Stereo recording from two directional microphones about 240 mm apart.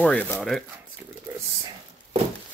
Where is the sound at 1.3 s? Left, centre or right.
Centre.